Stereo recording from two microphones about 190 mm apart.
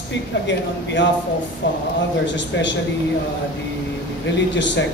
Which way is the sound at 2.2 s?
70° left (ahead or behind).